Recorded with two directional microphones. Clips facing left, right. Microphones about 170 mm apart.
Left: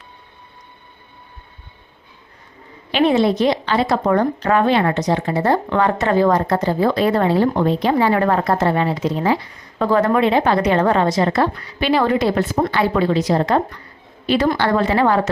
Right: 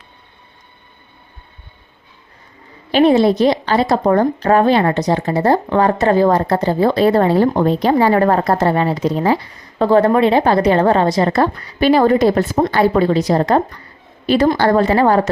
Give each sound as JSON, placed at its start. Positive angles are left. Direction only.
{"t": 2.9, "sound": "a woman's voice", "side_deg": -35}